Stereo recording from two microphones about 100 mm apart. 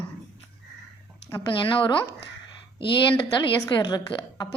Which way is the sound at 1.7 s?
55° left (ahead or behind).